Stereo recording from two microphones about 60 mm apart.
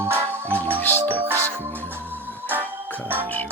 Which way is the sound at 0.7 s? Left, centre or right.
Left.